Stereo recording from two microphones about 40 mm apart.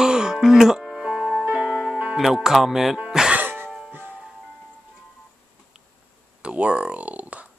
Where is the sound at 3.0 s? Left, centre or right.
Centre.